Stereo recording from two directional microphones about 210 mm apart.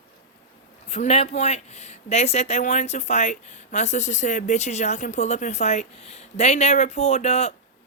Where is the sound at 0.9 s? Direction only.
30° left (ahead or behind).